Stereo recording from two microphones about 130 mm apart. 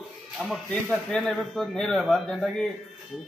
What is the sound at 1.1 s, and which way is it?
Speech, centre (ahead or behind).